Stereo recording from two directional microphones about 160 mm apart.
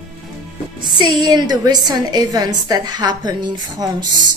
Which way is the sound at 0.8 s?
25° right (ahead or behind).